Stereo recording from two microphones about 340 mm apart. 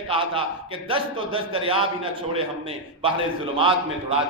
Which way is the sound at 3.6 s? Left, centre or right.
Centre.